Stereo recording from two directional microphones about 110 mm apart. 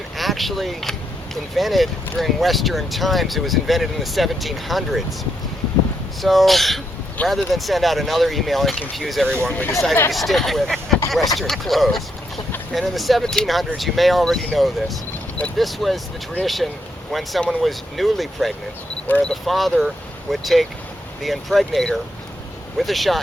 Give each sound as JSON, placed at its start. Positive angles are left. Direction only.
{"t": 0.2, "sound": "speech", "side_deg": 0}
{"t": 6.2, "sound": "speech", "side_deg": 0}
{"t": 19.0, "sound": "speech", "side_deg": 15}
{"t": 19.3, "sound": "speech", "side_deg": 0}